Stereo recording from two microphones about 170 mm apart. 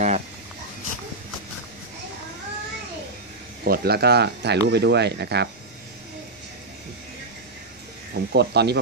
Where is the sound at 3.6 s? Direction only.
65° right (ahead or behind).